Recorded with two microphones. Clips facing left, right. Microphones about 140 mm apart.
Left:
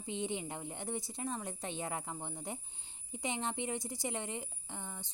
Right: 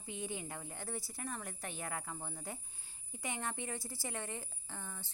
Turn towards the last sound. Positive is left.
turn(degrees=15)  # may be behind; listen again after turning